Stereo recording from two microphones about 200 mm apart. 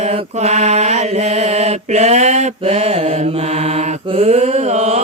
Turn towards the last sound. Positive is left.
turn(degrees=-35)  # may be behind; listen again after turning